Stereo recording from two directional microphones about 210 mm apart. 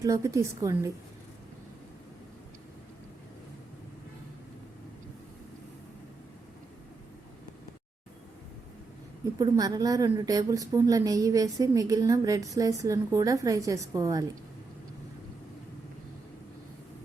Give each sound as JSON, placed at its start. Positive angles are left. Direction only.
{"t": 0.0, "sound": "a woman's voice", "side_deg": -15}
{"t": 9.4, "sound": "a woman's voice", "side_deg": -15}